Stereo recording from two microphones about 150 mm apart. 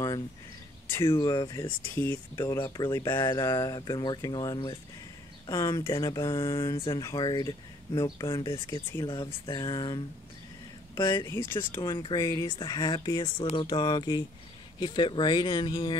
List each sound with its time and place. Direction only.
0.8 s speech: 15° left (ahead or behind)
1.1 s speech: 25° left (ahead or behind)
11.8 s speech: 30° left (ahead or behind)